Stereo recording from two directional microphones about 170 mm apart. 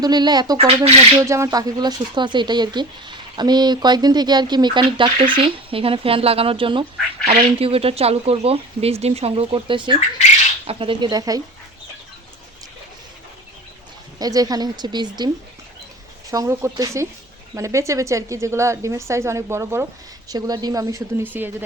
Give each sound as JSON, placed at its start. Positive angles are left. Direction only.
{"t": 0.0, "sound": "speech", "side_deg": -25}
{"t": 14.2, "sound": "speech", "side_deg": -20}
{"t": 16.3, "sound": "a woman's voice", "side_deg": -20}